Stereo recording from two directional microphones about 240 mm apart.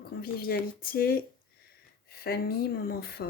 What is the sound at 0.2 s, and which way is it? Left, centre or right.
Speech, left.